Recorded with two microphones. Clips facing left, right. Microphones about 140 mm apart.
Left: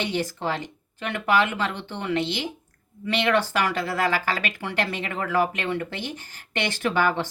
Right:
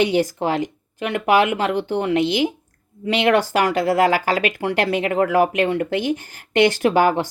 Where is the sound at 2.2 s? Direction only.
10° right (ahead or behind).